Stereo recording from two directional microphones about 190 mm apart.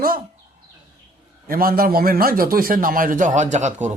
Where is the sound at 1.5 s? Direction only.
50° right (ahead or behind).